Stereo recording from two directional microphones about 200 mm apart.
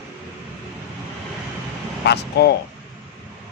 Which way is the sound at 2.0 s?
55° left (ahead or behind).